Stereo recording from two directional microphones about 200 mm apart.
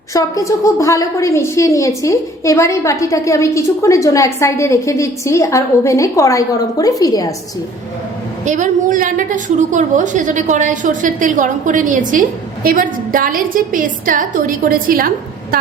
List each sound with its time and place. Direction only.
0.1 s a woman's voice: 15° left (ahead or behind)
8.4 s a woman's voice: 40° right (ahead or behind)